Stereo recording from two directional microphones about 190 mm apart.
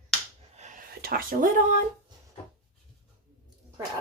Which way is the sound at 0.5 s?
40° right (ahead or behind).